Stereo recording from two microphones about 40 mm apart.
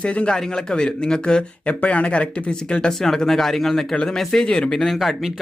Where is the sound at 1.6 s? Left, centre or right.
Left.